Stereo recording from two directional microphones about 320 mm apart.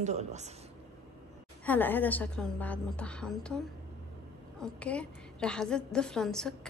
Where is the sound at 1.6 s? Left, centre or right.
Centre.